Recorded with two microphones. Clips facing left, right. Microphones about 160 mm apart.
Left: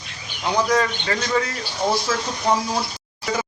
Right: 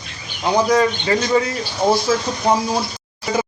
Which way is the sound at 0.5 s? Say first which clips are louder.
Right 5 dB; 15° right (ahead or behind).